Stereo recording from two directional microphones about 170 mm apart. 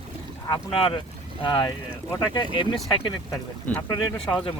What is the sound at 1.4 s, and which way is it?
Speech, 20° left (ahead or behind).